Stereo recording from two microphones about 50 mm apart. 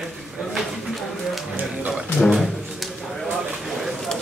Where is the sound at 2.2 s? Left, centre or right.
Centre.